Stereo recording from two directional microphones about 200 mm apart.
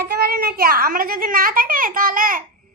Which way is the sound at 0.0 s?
50° right (ahead or behind).